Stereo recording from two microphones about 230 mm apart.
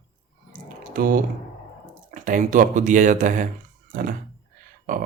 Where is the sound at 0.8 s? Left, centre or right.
Right.